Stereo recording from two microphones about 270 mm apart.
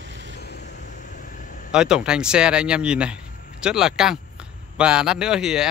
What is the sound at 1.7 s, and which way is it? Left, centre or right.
A man's voice, centre.